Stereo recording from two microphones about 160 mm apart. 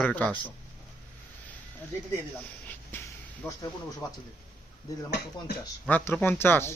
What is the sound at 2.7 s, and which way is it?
Snort, 10° left (ahead or behind).